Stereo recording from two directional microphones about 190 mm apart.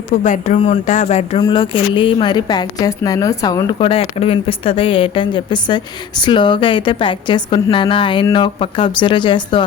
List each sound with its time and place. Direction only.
0.2 s speech: 40° left (ahead or behind)
1.4 s a woman's voice: 25° left (ahead or behind)